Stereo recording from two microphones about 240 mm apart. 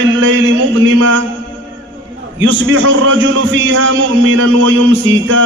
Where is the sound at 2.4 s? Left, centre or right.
Right.